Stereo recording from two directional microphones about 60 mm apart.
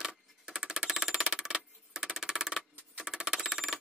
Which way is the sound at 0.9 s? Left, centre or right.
Centre.